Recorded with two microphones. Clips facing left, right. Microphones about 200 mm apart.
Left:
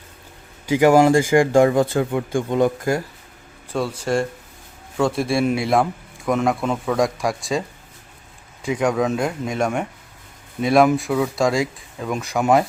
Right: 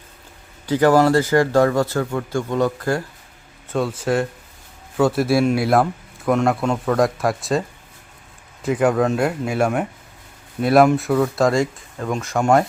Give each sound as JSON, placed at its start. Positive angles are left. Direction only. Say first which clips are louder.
{"t": 0.7, "sound": "speech", "louder": "left 1 dB", "side_deg": 10}
{"t": 3.7, "sound": "a man's voice", "louder": "right 1 dB", "side_deg": 0}
{"t": 8.6, "sound": "a man's voice", "louder": "right 2 dB", "side_deg": -5}